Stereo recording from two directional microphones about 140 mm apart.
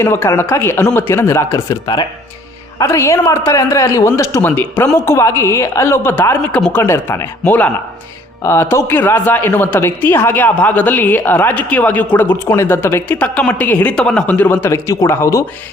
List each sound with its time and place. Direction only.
0.0 s speech: 15° left (ahead or behind)